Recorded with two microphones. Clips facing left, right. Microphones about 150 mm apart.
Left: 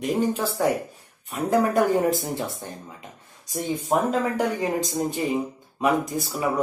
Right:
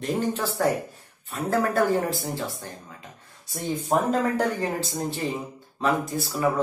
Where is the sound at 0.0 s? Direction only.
10° left (ahead or behind).